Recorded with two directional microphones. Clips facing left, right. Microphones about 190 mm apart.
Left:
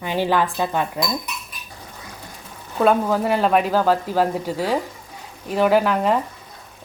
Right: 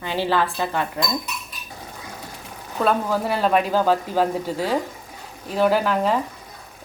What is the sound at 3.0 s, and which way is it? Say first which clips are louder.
Speech: left 2 dB; 10° left (ahead or behind).